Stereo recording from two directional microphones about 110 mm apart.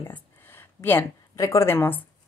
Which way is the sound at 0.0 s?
20° left (ahead or behind).